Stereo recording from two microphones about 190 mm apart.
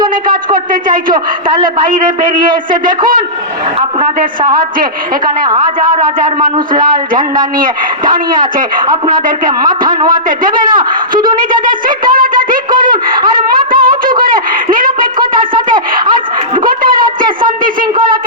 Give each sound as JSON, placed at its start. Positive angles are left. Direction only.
{"t": 0.3, "sound": "a woman's voice", "side_deg": -45}
{"t": 4.8, "sound": "a woman's voice", "side_deg": -45}
{"t": 7.1, "sound": "a woman's voice", "side_deg": -45}
{"t": 9.5, "sound": "a man's voice", "side_deg": -20}
{"t": 11.6, "sound": "a sound", "side_deg": -45}
{"t": 16.6, "sound": "a man's voice", "side_deg": -45}